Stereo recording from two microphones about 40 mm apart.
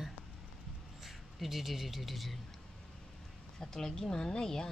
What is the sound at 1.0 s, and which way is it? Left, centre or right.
A man's voice, centre.